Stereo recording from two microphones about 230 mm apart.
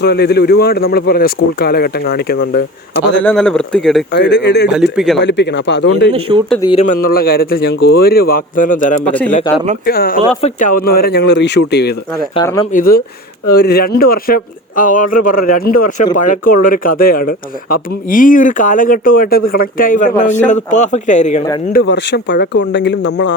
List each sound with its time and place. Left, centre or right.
0.0 s speech: left
3.2 s speech: centre
4.1 s speech: left
4.7 s speech: centre
5.2 s speech: left
6.1 s a man's voice: right
6.6 s speech: left
6.8 s speech: left
9.0 s speech: centre
9.8 s speech: left
21.7 s speech: left